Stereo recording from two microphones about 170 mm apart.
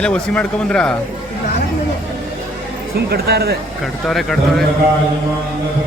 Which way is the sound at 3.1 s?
70° right (ahead or behind).